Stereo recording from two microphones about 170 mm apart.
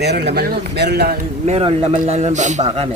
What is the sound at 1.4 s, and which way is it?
A man's voice, 35° right (ahead or behind).